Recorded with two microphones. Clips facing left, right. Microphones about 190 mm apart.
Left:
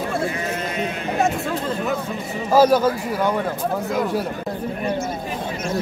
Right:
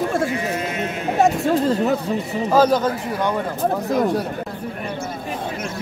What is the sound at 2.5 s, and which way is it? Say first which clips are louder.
Speech: left 2 dB; 10° left (ahead or behind).